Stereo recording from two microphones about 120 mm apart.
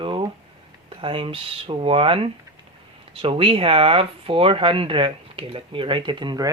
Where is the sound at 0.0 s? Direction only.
40° right (ahead or behind).